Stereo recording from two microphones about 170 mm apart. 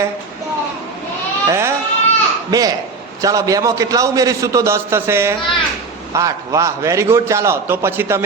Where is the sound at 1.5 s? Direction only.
15° right (ahead or behind).